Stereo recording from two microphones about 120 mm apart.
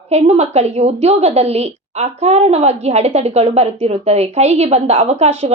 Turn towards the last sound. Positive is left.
turn(degrees=-65)  # may be behind; listen again after turning